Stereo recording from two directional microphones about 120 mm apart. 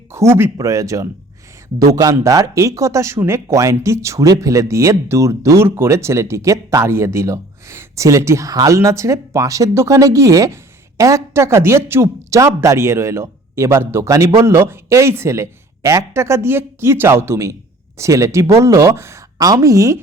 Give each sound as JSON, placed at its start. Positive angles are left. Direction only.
{"t": 0.1, "sound": "speech", "side_deg": -20}